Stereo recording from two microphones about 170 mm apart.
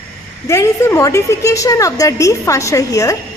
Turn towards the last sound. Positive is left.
turn(degrees=20)  # may be behind; listen again after turning